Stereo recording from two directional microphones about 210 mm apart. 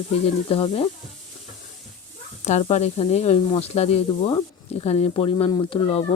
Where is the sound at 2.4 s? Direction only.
30° left (ahead or behind).